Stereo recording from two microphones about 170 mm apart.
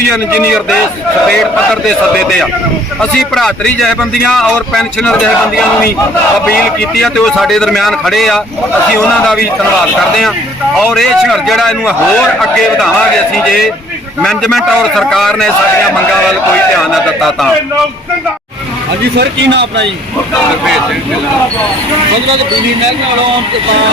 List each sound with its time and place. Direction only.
1.3 s a man's voice: 5° left (ahead or behind)
3.0 s a man's voice: centre (ahead or behind)
10.9 s a man's voice: centre (ahead or behind)
14.2 s a man's voice: centre (ahead or behind)
16.7 s a man's voice: centre (ahead or behind)
19.2 s speech: 90° right